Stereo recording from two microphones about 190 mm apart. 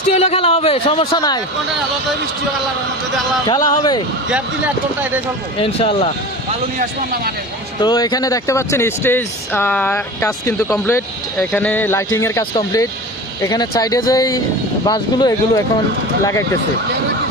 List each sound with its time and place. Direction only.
0.2 s speech: 30° left (ahead or behind)
3.4 s speech: 20° left (ahead or behind)
5.5 s speech: 30° left (ahead or behind)
6.7 s speech: 50° right (ahead or behind)
7.8 s speech: 20° left (ahead or behind)